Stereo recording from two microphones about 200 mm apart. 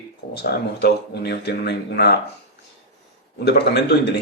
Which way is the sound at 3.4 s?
55° left (ahead or behind).